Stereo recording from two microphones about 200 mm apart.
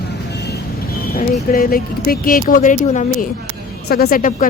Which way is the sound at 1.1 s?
45° left (ahead or behind).